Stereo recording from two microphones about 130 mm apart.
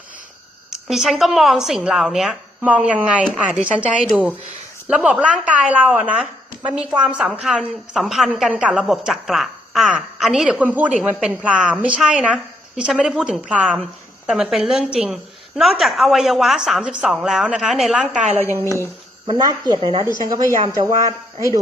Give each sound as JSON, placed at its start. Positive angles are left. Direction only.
{"t": 0.7, "sound": "a woman's voice", "side_deg": -5}
{"t": 4.9, "sound": "a woman's voice", "side_deg": -10}
{"t": 19.3, "sound": "a woman's voice", "side_deg": -30}